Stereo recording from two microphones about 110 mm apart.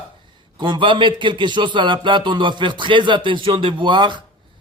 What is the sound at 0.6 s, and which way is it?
Speech, 45° right (ahead or behind).